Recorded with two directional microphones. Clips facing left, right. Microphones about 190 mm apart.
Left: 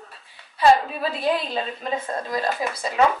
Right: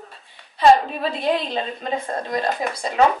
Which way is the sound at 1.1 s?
20° right (ahead or behind).